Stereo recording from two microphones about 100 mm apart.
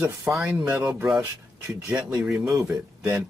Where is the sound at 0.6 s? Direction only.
20° right (ahead or behind).